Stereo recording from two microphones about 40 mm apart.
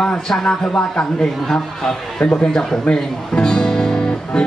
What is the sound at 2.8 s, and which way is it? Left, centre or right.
Music, left.